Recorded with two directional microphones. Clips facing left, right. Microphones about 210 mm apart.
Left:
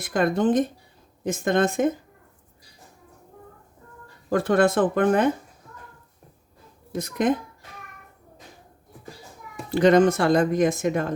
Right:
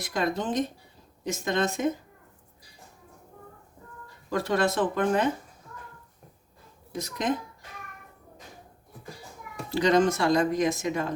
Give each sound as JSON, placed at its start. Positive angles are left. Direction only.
{"t": 0.0, "sound": "speech", "side_deg": 50}
{"t": 4.3, "sound": "speech", "side_deg": 50}
{"t": 6.9, "sound": "speech", "side_deg": 55}
{"t": 9.7, "sound": "speech", "side_deg": 55}